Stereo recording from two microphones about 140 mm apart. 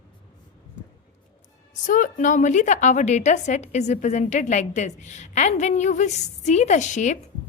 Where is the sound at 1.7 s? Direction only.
65° left (ahead or behind).